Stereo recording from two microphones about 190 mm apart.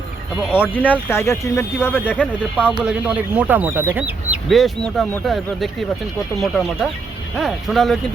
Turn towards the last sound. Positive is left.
turn(degrees=0)  # may be behind; listen again after turning